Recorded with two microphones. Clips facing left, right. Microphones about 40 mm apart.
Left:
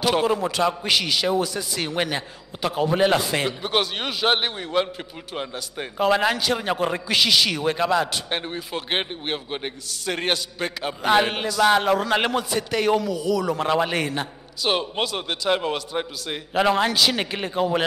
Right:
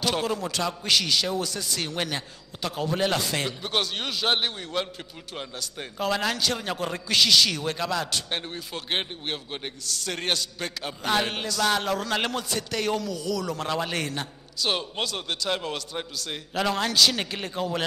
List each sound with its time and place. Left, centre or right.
0.0 s a man's voice: centre